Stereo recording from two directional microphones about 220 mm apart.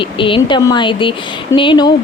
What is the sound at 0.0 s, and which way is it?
Speech, 25° left (ahead or behind).